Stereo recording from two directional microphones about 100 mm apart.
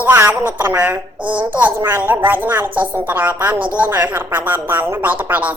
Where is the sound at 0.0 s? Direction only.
20° right (ahead or behind).